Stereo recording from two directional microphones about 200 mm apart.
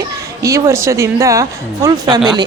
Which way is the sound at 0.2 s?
15° right (ahead or behind).